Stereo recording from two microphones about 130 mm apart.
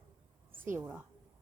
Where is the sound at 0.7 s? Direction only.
15° right (ahead or behind).